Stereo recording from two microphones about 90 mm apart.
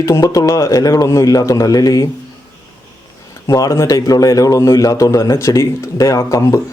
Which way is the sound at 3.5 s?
35° left (ahead or behind).